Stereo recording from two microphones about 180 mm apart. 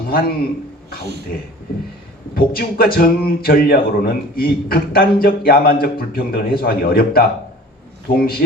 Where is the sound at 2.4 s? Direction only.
55° left (ahead or behind).